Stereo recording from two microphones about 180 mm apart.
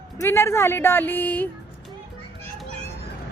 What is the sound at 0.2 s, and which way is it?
A woman's voice, 15° left (ahead or behind).